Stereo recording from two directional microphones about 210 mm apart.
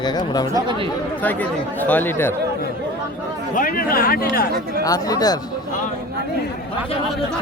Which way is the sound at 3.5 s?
40° left (ahead or behind).